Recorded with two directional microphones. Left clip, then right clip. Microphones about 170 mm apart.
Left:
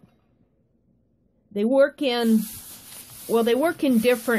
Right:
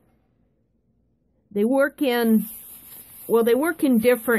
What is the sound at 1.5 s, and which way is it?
Speech, 30° right (ahead or behind).